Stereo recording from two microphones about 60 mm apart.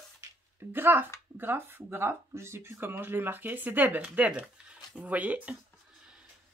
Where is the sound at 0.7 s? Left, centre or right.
Right.